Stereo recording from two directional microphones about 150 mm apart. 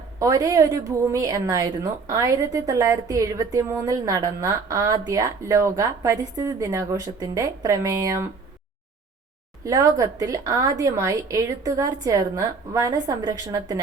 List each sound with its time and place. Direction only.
0.2 s a woman's voice: 20° right (ahead or behind)
9.6 s a woman's voice: 25° right (ahead or behind)